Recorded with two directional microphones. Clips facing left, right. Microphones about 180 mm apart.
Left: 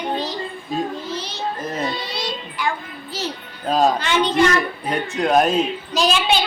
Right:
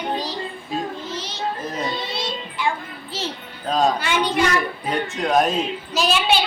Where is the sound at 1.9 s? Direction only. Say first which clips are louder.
Even; 25° right (ahead or behind).